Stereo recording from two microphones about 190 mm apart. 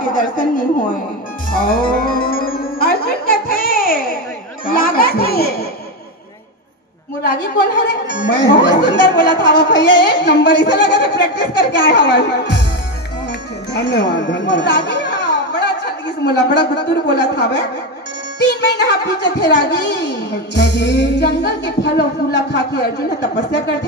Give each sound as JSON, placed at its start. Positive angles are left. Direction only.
{"t": 0.0, "sound": "speech", "side_deg": 45}
{"t": 1.5, "sound": "music", "side_deg": 50}
{"t": 4.6, "sound": "speech", "side_deg": 50}
{"t": 8.4, "sound": "speech", "side_deg": 70}
{"t": 13.7, "sound": "a child's voice", "side_deg": 65}
{"t": 18.4, "sound": "music", "side_deg": 65}